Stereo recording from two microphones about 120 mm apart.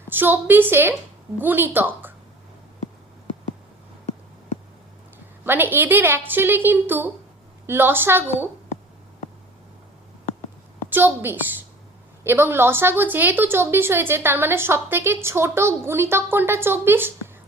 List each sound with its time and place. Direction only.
0.1 s a woman's voice: 15° right (ahead or behind)
5.5 s a woman's voice: 15° right (ahead or behind)
10.8 s a woman's voice: 15° right (ahead or behind)